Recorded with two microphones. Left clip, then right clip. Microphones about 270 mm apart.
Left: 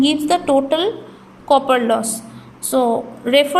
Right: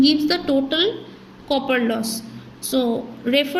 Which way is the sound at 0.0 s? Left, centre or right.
Centre.